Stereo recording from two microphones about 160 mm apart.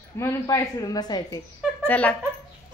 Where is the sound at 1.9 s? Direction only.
10° left (ahead or behind).